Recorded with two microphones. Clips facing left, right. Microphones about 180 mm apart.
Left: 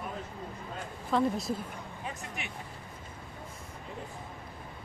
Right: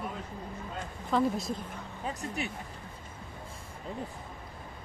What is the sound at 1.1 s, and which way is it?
Speech, centre (ahead or behind).